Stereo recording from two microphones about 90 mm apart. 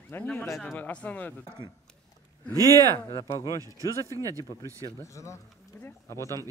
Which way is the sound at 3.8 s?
40° right (ahead or behind).